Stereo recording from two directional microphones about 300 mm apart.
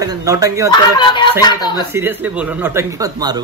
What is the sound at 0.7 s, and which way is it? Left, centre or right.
Speech, centre.